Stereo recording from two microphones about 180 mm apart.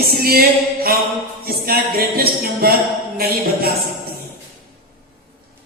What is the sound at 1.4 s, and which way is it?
Music, 55° right (ahead or behind).